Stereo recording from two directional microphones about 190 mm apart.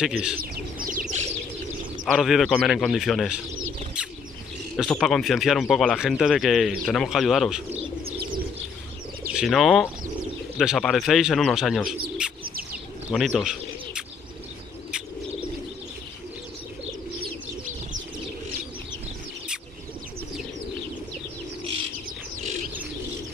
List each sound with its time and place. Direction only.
0.0 s speech: 5° right (ahead or behind)
0.4 s bird: 45° right (ahead or behind)
2.1 s speech: centre (ahead or behind)
4.7 s speech: centre (ahead or behind)
9.3 s speech: centre (ahead or behind)
12.2 s bird: 5° right (ahead or behind)
13.1 s speech: centre (ahead or behind)
17.2 s bird: 45° right (ahead or behind)